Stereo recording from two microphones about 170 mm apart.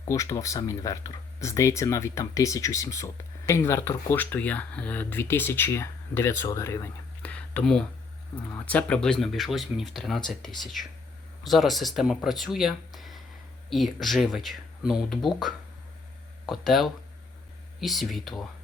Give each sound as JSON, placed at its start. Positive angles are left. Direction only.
{"t": 0.1, "sound": "speech", "side_deg": 20}
{"t": 11.4, "sound": "speech", "side_deg": 0}